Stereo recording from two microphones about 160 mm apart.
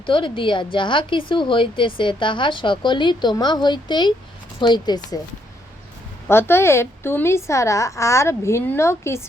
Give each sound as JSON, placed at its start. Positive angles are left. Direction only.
{"t": 0.0, "sound": "a woman's voice", "side_deg": 30}
{"t": 6.2, "sound": "a woman's voice", "side_deg": 15}